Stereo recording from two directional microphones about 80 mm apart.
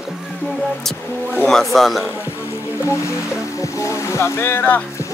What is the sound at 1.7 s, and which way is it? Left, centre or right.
Speech, centre.